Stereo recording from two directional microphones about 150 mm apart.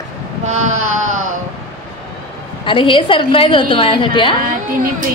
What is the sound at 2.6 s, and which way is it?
A woman's voice, 35° left (ahead or behind).